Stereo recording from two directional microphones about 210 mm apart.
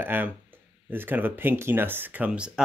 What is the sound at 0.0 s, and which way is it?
Speech, 10° right (ahead or behind).